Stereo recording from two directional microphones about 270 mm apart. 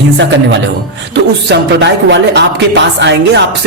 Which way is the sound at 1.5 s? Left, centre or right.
Right.